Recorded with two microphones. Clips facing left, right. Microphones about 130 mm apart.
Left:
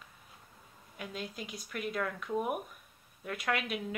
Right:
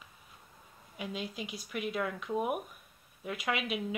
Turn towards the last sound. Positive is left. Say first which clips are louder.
# even
turn(degrees=-5)  # may be behind; listen again after turning